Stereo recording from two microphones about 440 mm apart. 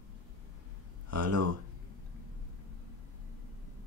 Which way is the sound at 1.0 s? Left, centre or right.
Right.